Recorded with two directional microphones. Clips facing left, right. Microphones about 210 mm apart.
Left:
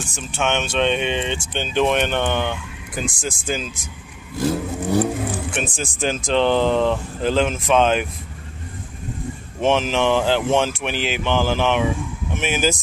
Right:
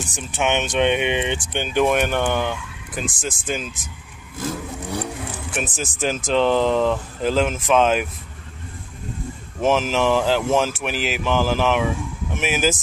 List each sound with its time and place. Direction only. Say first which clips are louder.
0.0 s speech: even; 15° right (ahead or behind); by 3.9 s centre (ahead or behind)
4.4 s vehicle: left 6 dB; 35° left (ahead or behind)
5.8 s speech: left 1 dB; 5° right (ahead or behind)
9.6 s speech: even; 5° right (ahead or behind)